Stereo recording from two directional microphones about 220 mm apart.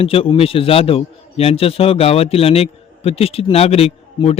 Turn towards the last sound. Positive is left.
turn(degrees=25)  # may be behind; listen again after turning